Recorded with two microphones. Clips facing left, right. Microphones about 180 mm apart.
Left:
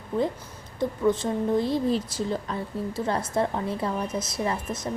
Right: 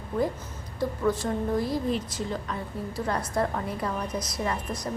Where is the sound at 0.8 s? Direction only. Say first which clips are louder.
Left 3 dB; 20° left (ahead or behind).